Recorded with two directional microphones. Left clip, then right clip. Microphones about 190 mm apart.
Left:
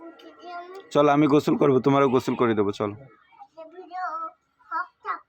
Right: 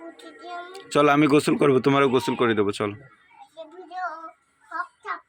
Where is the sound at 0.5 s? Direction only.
5° left (ahead or behind).